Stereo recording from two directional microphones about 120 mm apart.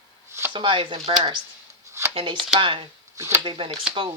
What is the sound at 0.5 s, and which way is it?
Speech, 45° right (ahead or behind).